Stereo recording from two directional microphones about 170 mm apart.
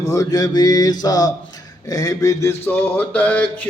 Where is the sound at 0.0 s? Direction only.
20° left (ahead or behind).